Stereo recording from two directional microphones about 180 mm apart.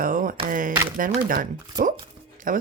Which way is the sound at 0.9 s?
50° right (ahead or behind).